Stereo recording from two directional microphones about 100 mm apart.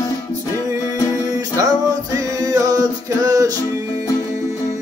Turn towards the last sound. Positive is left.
turn(degrees=-40)  # may be behind; listen again after turning